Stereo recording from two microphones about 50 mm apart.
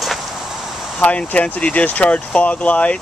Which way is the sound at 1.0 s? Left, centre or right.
Left.